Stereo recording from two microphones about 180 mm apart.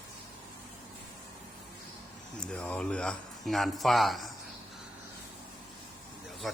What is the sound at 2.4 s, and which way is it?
Speech, 5° left (ahead or behind).